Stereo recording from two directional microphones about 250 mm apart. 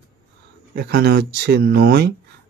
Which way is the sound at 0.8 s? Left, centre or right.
Right.